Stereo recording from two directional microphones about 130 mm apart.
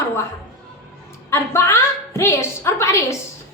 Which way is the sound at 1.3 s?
20° left (ahead or behind).